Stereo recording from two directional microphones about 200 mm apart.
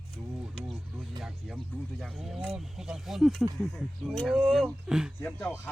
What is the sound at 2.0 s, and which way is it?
Speech, centre (ahead or behind).